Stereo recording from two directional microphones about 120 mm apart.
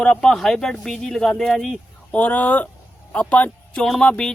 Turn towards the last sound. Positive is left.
turn(degrees=5)  # may be behind; listen again after turning